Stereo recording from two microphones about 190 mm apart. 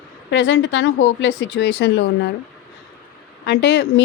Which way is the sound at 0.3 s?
75° left (ahead or behind).